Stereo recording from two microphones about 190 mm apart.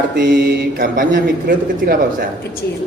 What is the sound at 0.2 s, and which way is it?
A man's voice, 50° right (ahead or behind).